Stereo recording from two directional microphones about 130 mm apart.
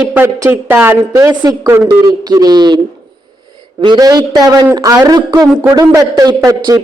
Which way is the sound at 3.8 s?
30° right (ahead or behind).